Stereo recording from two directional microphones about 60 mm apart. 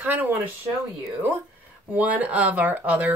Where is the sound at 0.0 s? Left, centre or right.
Right.